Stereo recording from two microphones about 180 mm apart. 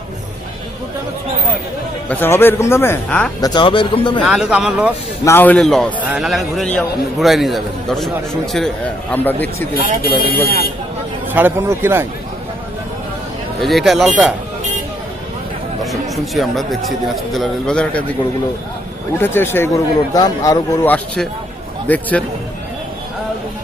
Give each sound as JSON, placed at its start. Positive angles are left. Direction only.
{"t": 2.0, "sound": "speech", "side_deg": 10}
{"t": 3.4, "sound": "speech", "side_deg": 25}
{"t": 4.2, "sound": "a man's voice", "side_deg": -5}
{"t": 5.2, "sound": "a man's voice", "side_deg": 10}
{"t": 9.7, "sound": "speech", "side_deg": -45}
{"t": 11.3, "sound": "a man's voice", "side_deg": -10}
{"t": 13.6, "sound": "a man's voice", "side_deg": 0}
{"t": 15.8, "sound": "a man's voice", "side_deg": 0}
{"t": 19.2, "sound": "speech", "side_deg": 10}